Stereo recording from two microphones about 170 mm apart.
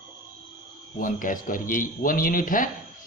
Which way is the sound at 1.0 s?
55° left (ahead or behind).